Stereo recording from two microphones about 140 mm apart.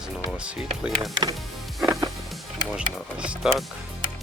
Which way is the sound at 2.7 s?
5° right (ahead or behind).